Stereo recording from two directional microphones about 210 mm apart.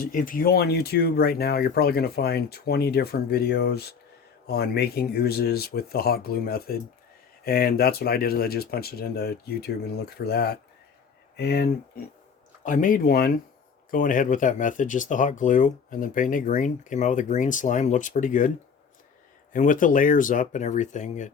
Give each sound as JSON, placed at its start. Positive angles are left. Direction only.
{"t": 0.0, "sound": "speech", "side_deg": 40}
{"t": 12.6, "sound": "speech", "side_deg": 40}
{"t": 19.5, "sound": "speech", "side_deg": 40}